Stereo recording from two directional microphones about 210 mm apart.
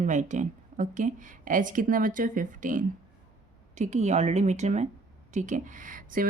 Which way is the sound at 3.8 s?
35° right (ahead or behind).